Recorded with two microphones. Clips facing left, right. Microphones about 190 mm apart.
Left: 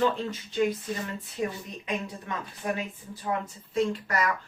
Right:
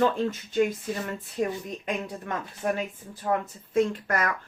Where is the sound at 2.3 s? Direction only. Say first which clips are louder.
Right 3 dB; 50° right (ahead or behind).